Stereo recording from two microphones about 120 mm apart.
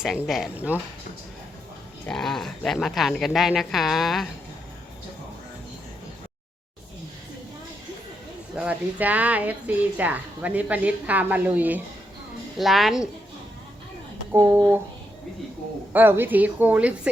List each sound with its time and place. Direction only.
0.7 s a woman's voice: 15° right (ahead or behind)
2.0 s speech: 5° left (ahead or behind)
8.5 s a woman's voice: 10° right (ahead or behind)
12.5 s speech: centre (ahead or behind)
14.3 s speech: 20° right (ahead or behind)
15.9 s a woman's voice: 15° right (ahead or behind)